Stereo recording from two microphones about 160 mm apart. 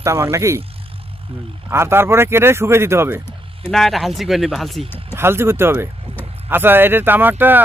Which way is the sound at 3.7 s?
Centre (ahead or behind).